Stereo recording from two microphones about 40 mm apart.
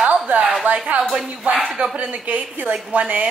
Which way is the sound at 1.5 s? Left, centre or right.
Right.